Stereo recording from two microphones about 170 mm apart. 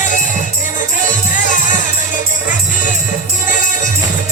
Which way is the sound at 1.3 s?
50° left (ahead or behind).